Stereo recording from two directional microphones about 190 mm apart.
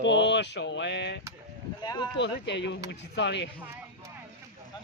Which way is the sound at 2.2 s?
65° left (ahead or behind).